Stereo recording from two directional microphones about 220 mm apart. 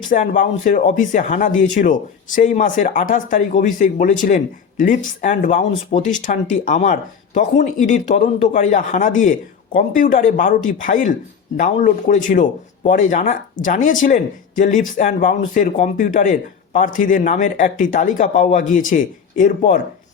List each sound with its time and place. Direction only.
0.1 s speech: 35° left (ahead or behind)